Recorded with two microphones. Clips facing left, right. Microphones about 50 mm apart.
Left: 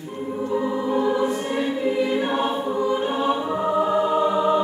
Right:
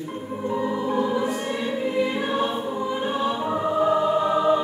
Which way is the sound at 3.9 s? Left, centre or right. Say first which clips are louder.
Left 1 dB; centre.